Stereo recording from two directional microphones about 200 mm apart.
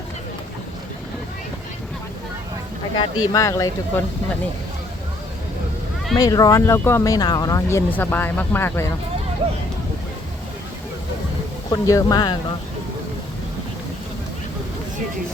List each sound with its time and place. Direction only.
2.9 s speech: 20° left (ahead or behind)
6.1 s speech: 15° left (ahead or behind)
11.7 s speech: 15° left (ahead or behind)